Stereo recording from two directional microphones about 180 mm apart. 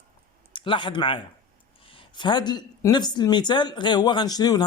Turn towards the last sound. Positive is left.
turn(degrees=20)  # may be behind; listen again after turning